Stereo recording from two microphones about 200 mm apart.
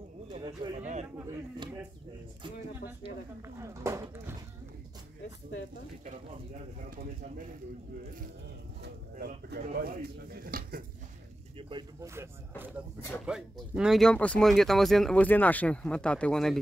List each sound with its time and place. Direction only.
0.6 s speech: 20° right (ahead or behind)
3.4 s speech: 15° right (ahead or behind)
9.1 s speech: 45° right (ahead or behind)
11.5 s speech: 25° right (ahead or behind)
12.1 s speech: 10° right (ahead or behind)